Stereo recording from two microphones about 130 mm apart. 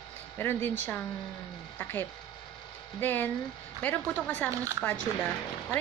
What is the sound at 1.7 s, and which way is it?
Speech, 15° left (ahead or behind).